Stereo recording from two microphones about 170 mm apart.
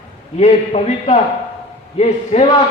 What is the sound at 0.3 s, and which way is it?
A man's voice, 40° left (ahead or behind).